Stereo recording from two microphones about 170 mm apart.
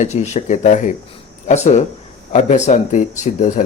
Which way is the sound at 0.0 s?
40° left (ahead or behind).